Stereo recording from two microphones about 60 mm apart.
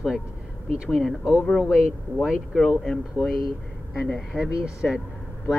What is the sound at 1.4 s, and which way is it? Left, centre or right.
Speech, centre.